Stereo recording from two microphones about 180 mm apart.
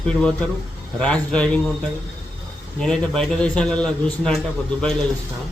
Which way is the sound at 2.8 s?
5° left (ahead or behind).